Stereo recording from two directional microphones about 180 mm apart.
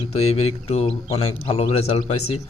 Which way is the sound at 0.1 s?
35° left (ahead or behind).